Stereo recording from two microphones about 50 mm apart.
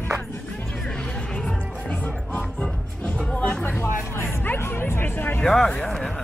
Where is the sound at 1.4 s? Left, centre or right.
Left.